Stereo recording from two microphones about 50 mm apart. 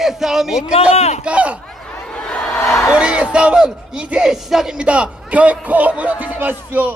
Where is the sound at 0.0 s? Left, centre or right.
Centre.